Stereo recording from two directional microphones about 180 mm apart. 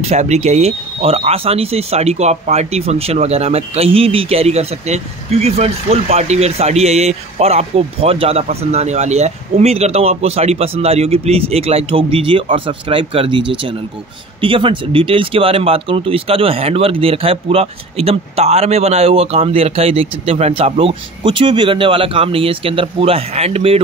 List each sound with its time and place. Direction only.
0.0 s speech: 35° right (ahead or behind)